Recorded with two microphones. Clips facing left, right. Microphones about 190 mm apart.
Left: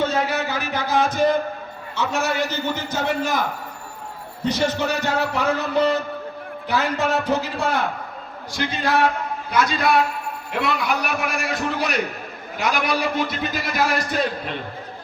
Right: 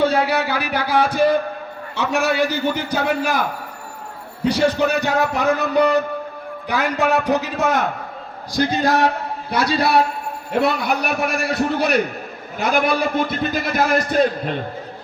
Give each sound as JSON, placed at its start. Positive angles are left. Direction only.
{"t": 0.3, "sound": "a sound", "side_deg": -10}
{"t": 2.0, "sound": "a man's voice", "side_deg": -15}
{"t": 4.4, "sound": "a man's voice", "side_deg": -15}
{"t": 8.5, "sound": "a man's voice", "side_deg": -40}
{"t": 11.7, "sound": "a man's voice", "side_deg": -55}